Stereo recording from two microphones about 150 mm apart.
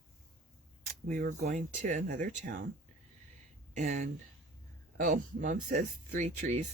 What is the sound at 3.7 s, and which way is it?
Speech, 50° right (ahead or behind).